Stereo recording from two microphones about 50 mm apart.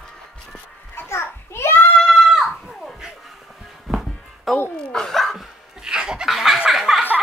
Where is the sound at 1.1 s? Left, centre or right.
Left.